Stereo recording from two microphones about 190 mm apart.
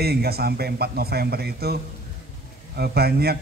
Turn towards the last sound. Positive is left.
turn(degrees=-55)  # may be behind; listen again after turning